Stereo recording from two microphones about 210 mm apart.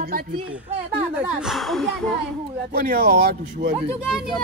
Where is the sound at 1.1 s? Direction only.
5° right (ahead or behind).